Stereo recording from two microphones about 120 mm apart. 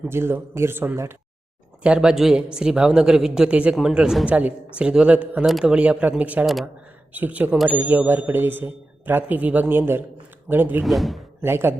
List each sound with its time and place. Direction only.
0.1 s a man's voice: 20° right (ahead or behind)
1.8 s speech: 10° right (ahead or behind)
6.4 s speech: centre (ahead or behind)
7.1 s speech: 15° right (ahead or behind)
7.8 s speech: 15° right (ahead or behind)
10.8 s speech: centre (ahead or behind)
11.4 s a man's voice: 20° right (ahead or behind)